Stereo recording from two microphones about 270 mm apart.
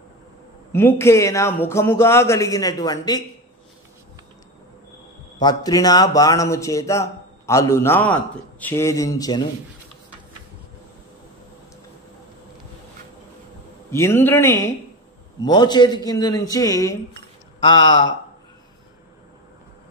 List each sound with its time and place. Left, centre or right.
0.7 s a man's voice: centre
5.4 s a man's voice: centre
13.9 s a man's voice: centre